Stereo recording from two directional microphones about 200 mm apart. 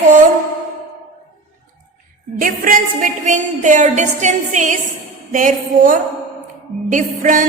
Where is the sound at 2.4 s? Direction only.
40° right (ahead or behind).